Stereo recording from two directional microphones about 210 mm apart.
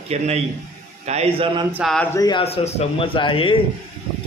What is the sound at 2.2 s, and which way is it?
Speech, 20° left (ahead or behind).